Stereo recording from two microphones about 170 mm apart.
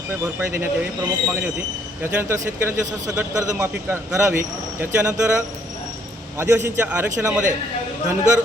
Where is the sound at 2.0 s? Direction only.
15° right (ahead or behind).